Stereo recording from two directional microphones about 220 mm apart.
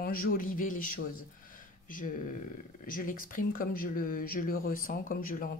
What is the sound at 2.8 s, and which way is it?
A woman's voice, 40° left (ahead or behind).